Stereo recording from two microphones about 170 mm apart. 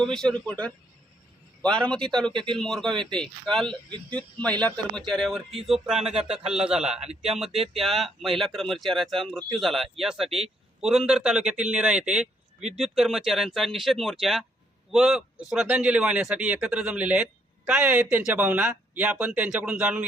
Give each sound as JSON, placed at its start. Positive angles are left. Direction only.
{"t": 0.0, "sound": "speech", "side_deg": 5}
{"t": 7.0, "sound": "speech", "side_deg": -40}
{"t": 7.3, "sound": "a man's voice", "side_deg": 0}